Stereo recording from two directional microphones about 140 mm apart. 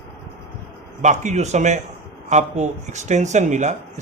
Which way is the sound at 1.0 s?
55° right (ahead or behind).